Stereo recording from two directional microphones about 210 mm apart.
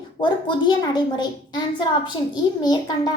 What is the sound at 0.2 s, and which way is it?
A child's voice, 20° left (ahead or behind).